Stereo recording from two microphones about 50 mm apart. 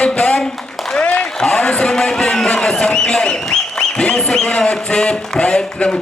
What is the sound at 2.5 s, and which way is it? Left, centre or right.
Music, centre.